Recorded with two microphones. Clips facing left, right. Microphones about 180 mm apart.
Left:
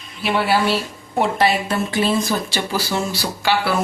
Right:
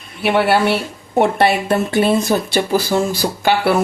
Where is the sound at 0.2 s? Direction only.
65° right (ahead or behind).